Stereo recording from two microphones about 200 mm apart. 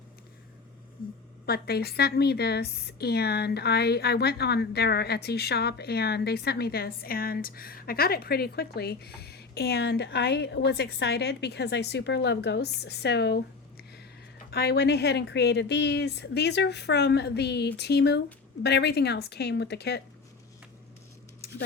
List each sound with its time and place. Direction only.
1.0 s a woman's voice: 45° left (ahead or behind)
14.5 s speech: 55° left (ahead or behind)
21.4 s a sound: 50° left (ahead or behind)